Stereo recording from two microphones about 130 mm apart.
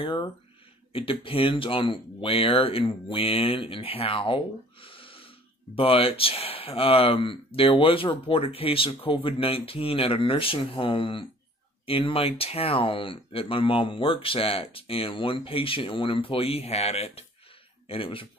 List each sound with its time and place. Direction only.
0.0 s speech: 40° left (ahead or behind)